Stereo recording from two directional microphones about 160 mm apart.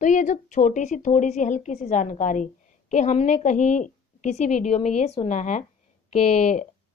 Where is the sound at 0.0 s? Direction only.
50° left (ahead or behind).